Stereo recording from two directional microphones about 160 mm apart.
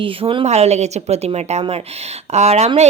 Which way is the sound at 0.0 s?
35° right (ahead or behind).